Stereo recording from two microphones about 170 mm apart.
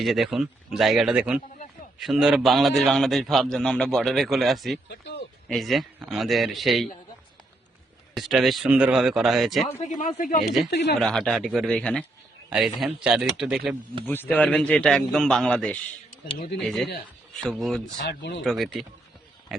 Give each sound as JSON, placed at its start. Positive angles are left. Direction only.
{"t": 0.0, "sound": "a man's voice", "side_deg": 0}
{"t": 8.1, "sound": "a man's voice", "side_deg": 0}
{"t": 9.6, "sound": "speech", "side_deg": 40}
{"t": 10.7, "sound": "speech", "side_deg": 80}
{"t": 11.0, "sound": "a man's voice", "side_deg": 0}
{"t": 14.0, "sound": "a man's voice", "side_deg": 10}
{"t": 18.1, "sound": "speech", "side_deg": 85}
{"t": 18.4, "sound": "a man's voice", "side_deg": 0}